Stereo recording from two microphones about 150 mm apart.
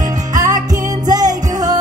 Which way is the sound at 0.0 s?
25° right (ahead or behind).